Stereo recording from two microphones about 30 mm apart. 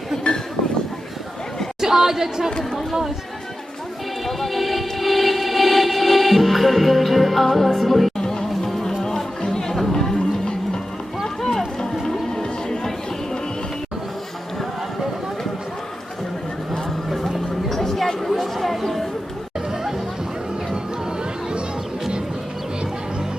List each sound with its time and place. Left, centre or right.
1.8 s speech: centre
4.3 s music: centre
8.2 s music: left
8.6 s music: centre
9.7 s chatter: centre
11.3 s a sound: centre
12.3 s a sound: left
17.1 s music: centre
18.2 s chatter: centre